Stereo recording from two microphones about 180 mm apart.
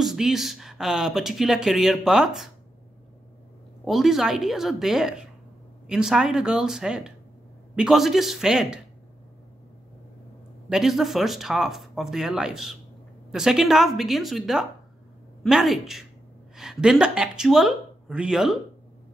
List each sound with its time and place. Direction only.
0.0 s speech: centre (ahead or behind)
3.8 s speech: centre (ahead or behind)
10.7 s speech: centre (ahead or behind)